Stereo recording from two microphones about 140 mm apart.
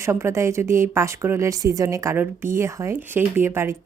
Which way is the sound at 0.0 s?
20° right (ahead or behind).